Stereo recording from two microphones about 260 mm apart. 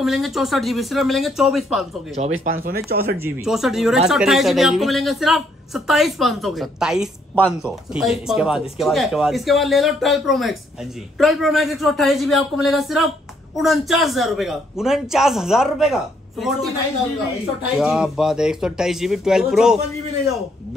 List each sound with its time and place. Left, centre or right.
0.0 s speech: centre
2.2 s speech: right
2.9 s speech: right
3.2 s speech: centre
17.7 s speech: centre